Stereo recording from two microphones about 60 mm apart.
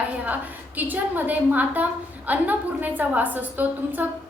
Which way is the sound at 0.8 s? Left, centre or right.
Right.